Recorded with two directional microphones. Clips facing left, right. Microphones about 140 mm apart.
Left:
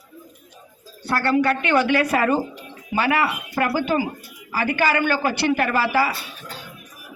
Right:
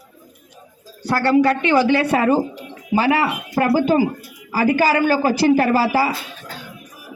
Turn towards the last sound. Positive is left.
turn(degrees=-35)  # may be behind; listen again after turning